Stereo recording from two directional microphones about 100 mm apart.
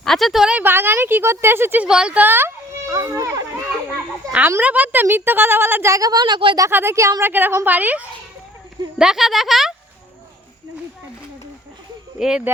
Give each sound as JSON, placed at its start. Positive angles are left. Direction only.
{"t": 0.0, "sound": "a woman's voice", "side_deg": 0}
{"t": 0.5, "sound": "speech", "side_deg": -20}
{"t": 1.9, "sound": "speech", "side_deg": -10}
{"t": 2.9, "sound": "a child's voice", "side_deg": -35}
{"t": 4.3, "sound": "speech", "side_deg": -15}
{"t": 5.9, "sound": "speech", "side_deg": -40}
{"t": 6.7, "sound": "speech", "side_deg": -25}
{"t": 9.0, "sound": "speech", "side_deg": -5}
{"t": 12.2, "sound": "speech", "side_deg": -5}